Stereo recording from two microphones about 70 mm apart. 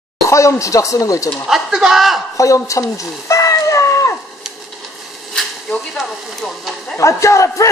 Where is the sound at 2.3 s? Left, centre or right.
Left.